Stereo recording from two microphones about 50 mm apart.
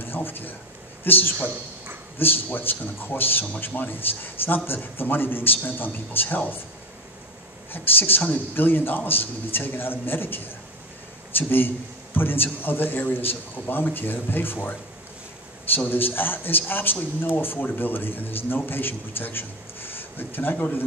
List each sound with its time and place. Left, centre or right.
0.0 s speech: left
7.7 s a man's voice: left
15.9 s speech: left